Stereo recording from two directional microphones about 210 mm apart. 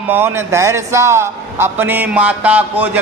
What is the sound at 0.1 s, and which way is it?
A man's voice, 10° right (ahead or behind).